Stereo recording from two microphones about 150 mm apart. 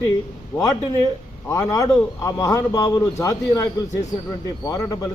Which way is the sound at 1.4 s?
20° left (ahead or behind).